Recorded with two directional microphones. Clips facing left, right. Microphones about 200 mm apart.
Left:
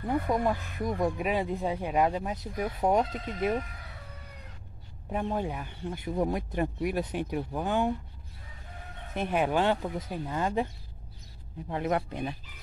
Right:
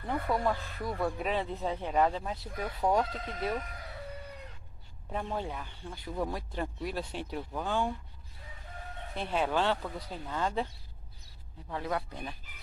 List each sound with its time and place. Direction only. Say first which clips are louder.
0.0 s speech: left 3 dB; 15° left (ahead or behind)
5.1 s speech: left 4 dB; 15° left (ahead or behind)
9.1 s speech: left 4 dB; 15° left (ahead or behind)